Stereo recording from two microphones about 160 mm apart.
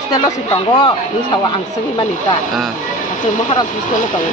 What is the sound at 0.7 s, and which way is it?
Speech, 30° left (ahead or behind).